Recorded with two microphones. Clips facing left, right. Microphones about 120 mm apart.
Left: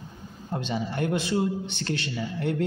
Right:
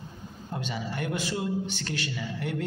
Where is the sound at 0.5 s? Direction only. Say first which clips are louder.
Left 4 dB; 30° left (ahead or behind).